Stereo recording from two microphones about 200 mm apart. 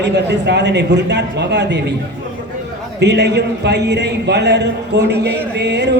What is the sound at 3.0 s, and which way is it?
A man's voice, 60° right (ahead or behind).